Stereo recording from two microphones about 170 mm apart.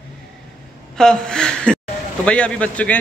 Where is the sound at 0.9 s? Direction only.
5° left (ahead or behind).